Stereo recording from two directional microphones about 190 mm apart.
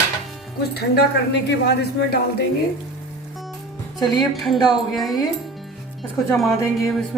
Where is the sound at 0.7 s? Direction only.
60° left (ahead or behind).